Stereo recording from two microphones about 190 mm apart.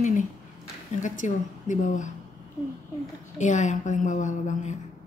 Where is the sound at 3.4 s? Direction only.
40° left (ahead or behind).